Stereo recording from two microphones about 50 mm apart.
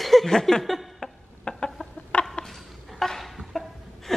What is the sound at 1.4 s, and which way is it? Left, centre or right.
Chicken, centre.